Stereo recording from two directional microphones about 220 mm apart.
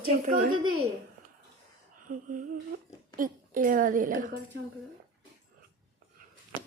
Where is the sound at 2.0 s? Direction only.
35° right (ahead or behind).